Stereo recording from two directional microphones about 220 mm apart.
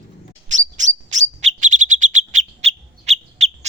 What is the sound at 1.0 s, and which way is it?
Bird, 30° right (ahead or behind).